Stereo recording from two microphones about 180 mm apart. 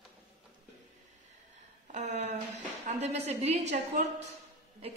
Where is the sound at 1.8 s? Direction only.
40° right (ahead or behind).